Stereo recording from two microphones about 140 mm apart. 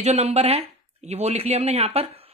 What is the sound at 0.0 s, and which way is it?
Speech, 50° right (ahead or behind).